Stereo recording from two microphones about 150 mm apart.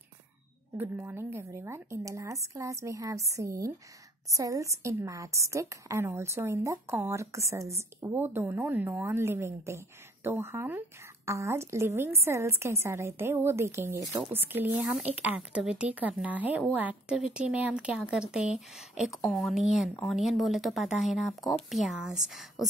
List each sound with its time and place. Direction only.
0.7 s a woman's voice: 15° right (ahead or behind)